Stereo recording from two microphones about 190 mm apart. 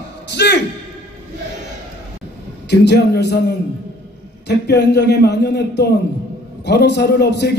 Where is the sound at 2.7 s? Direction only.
60° left (ahead or behind).